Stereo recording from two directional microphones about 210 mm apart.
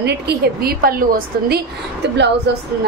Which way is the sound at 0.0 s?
50° right (ahead or behind).